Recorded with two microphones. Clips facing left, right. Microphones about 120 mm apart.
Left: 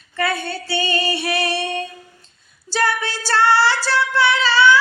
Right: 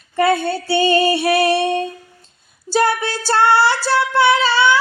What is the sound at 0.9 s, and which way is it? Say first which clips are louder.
Music: right 9 dB; 45° right (ahead or behind).